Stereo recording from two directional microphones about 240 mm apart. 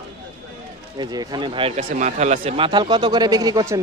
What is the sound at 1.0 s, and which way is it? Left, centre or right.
Speech, centre.